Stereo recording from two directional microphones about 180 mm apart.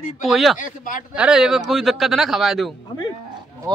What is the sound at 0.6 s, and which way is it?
Speech, 50° left (ahead or behind).